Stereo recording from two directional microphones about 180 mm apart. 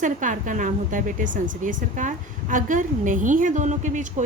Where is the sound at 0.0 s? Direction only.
45° right (ahead or behind).